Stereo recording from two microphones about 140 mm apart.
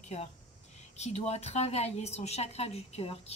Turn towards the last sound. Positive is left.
turn(degrees=45)  # may be behind; listen again after turning